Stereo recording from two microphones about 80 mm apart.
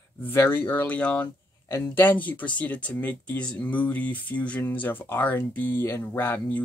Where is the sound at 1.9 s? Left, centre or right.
Left.